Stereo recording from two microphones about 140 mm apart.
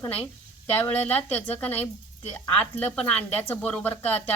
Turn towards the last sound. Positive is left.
turn(degrees=10)  # may be behind; listen again after turning